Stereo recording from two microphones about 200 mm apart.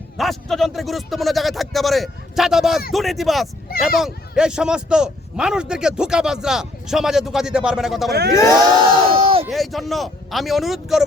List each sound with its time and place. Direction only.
0.2 s a man's voice: centre (ahead or behind)
3.7 s speech: 50° left (ahead or behind)
4.0 s a man's voice: 5° right (ahead or behind)
8.1 s speech: 55° right (ahead or behind)
9.1 s a sound: 30° right (ahead or behind)
9.5 s a man's voice: centre (ahead or behind)